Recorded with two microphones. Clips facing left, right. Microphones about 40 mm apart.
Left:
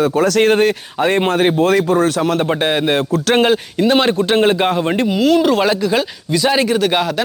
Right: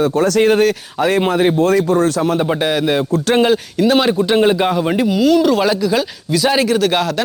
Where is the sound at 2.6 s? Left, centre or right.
Left.